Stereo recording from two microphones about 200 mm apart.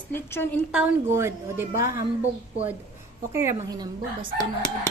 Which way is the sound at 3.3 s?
15° right (ahead or behind).